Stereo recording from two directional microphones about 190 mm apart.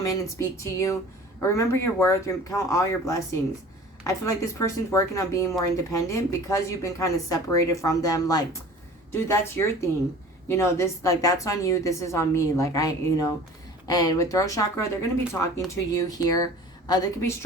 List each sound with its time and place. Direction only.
0.0 s speech: 15° left (ahead or behind)